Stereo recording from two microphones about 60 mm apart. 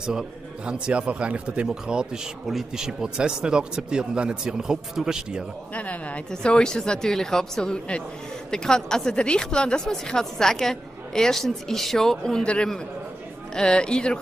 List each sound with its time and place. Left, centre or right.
0.0 s speech: centre
5.8 s speech: left